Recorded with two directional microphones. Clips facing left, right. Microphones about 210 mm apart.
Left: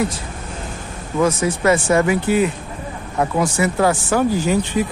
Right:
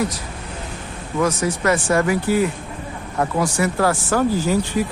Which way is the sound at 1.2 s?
25° left (ahead or behind).